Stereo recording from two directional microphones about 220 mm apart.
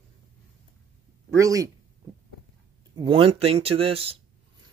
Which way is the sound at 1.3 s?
15° right (ahead or behind).